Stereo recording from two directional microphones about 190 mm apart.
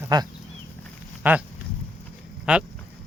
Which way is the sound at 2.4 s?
5° right (ahead or behind).